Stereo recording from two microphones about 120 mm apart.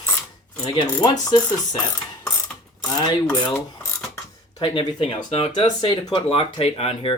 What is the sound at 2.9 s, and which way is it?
Dishes, 35° left (ahead or behind).